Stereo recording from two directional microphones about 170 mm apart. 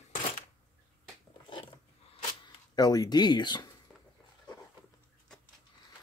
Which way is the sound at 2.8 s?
20° left (ahead or behind).